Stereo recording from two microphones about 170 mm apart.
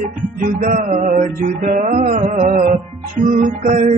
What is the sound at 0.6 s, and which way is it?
Music, 45° right (ahead or behind).